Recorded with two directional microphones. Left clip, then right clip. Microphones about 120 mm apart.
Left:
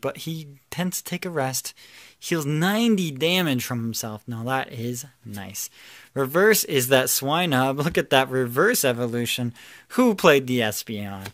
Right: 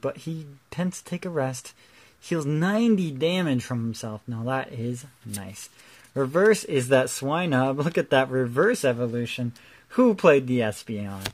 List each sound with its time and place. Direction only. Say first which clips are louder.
0.0 s speech: left 1 dB; 10° left (ahead or behind)
6.1 s speech: left 1 dB; 10° left (ahead or behind); by 9.5 s 30° left (ahead or behind)
9.9 s speech: left 1 dB; 15° left (ahead or behind)